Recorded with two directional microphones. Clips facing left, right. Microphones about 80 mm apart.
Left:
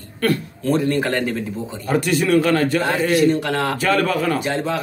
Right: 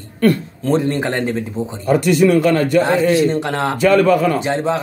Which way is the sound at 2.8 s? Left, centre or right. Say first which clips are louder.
Right 2 dB; right.